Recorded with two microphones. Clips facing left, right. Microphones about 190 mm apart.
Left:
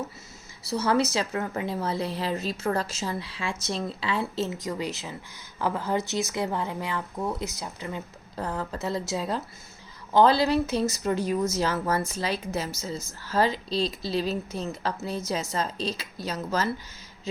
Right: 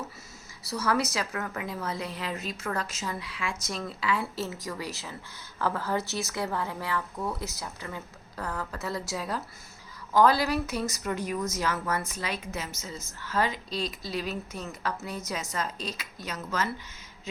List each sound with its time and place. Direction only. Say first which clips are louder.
0.7 s a woman's voice: left 4 dB; 25° left (ahead or behind)